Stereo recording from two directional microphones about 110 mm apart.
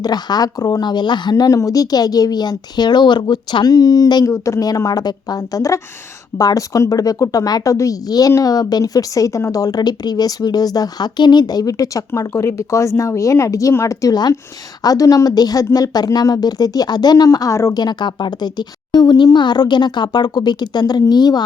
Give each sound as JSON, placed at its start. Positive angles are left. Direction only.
{"t": 0.0, "sound": "a woman's voice", "side_deg": 40}